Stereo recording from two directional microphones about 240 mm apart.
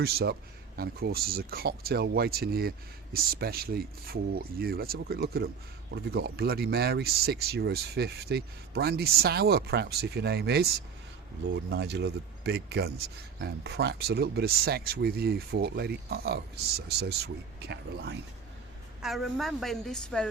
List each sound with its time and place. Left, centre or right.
0.0 s speech: right
19.0 s a woman's voice: centre